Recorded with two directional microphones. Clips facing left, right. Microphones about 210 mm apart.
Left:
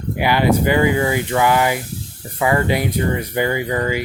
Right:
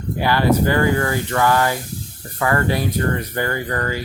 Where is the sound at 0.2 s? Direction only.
15° left (ahead or behind).